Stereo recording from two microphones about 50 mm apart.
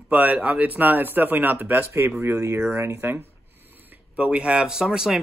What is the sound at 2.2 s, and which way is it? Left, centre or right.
Speech, right.